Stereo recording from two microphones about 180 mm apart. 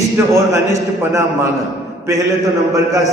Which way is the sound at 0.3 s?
15° right (ahead or behind).